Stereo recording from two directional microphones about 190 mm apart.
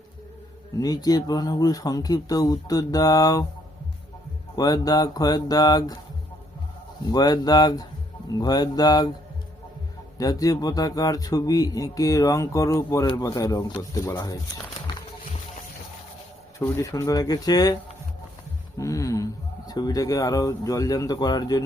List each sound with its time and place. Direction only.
0.8 s speech: 20° left (ahead or behind)
4.5 s speech: 20° left (ahead or behind)
7.1 s speech: 20° left (ahead or behind)
10.2 s speech: 20° left (ahead or behind)
16.6 s speech: 15° left (ahead or behind)
18.8 s speech: 15° left (ahead or behind)